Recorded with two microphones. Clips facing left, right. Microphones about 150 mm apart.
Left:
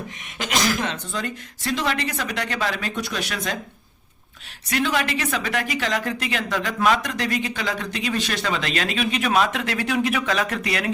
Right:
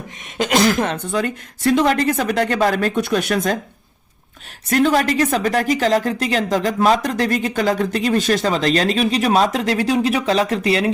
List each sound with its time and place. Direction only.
0.4 s a woman's voice: 55° right (ahead or behind)
4.7 s a woman's voice: 45° right (ahead or behind)